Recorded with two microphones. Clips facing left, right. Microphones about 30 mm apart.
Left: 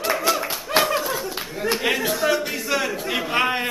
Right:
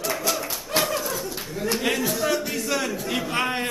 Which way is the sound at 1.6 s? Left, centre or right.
Left.